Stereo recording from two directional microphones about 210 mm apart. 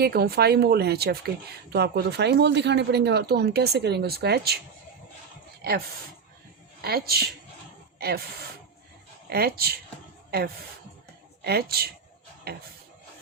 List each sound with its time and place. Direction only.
0.0 s speech: 50° right (ahead or behind)
6.8 s speech: 45° right (ahead or behind)
9.3 s speech: 50° right (ahead or behind)
11.4 s speech: 50° right (ahead or behind)